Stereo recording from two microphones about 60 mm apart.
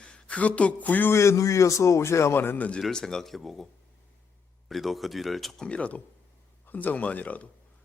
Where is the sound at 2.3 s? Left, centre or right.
Left.